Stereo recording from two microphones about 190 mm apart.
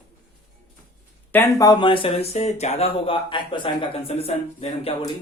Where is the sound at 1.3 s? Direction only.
15° left (ahead or behind); by 4.9 s 35° left (ahead or behind).